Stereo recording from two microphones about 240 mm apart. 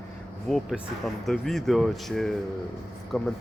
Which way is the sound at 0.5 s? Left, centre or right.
Centre.